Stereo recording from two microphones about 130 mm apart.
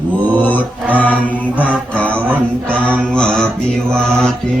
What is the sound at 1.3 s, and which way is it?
Mantra, 10° left (ahead or behind).